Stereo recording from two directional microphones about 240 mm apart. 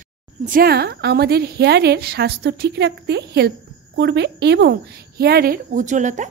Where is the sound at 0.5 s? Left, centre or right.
Right.